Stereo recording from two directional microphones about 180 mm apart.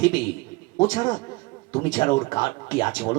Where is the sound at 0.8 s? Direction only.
25° left (ahead or behind).